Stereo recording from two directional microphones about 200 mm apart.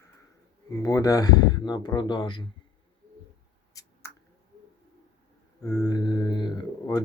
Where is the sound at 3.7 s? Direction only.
15° left (ahead or behind).